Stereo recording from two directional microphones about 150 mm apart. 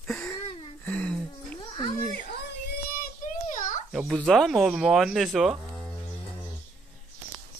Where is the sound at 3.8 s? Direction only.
Centre (ahead or behind).